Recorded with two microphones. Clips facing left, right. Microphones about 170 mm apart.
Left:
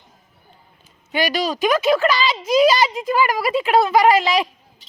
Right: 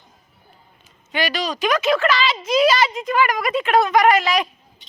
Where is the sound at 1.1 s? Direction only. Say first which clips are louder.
Left 3 dB; 10° left (ahead or behind).